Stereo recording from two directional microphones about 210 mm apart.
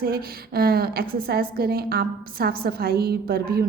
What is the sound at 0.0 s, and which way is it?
A woman's voice, 45° right (ahead or behind).